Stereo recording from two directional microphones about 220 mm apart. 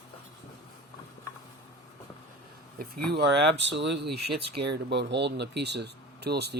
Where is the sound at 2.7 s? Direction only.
45° right (ahead or behind).